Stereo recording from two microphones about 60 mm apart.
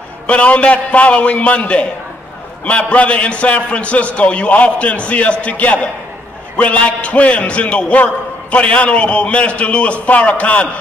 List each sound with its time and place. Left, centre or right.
0.3 s a man's voice: left